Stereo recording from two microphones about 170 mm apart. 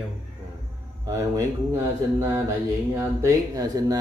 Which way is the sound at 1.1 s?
15° right (ahead or behind).